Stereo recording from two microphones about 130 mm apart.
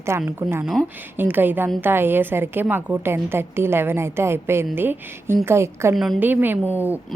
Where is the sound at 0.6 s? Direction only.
5° left (ahead or behind).